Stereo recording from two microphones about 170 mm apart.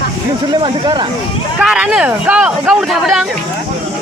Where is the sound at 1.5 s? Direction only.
5° right (ahead or behind).